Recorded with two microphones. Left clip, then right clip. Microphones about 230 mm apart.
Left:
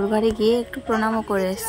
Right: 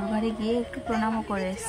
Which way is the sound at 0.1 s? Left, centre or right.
Left.